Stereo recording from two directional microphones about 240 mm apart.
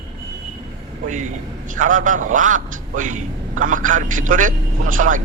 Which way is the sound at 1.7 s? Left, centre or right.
Right.